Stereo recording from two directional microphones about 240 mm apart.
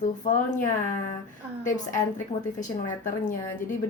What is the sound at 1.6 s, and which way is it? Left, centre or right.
A woman's voice, left.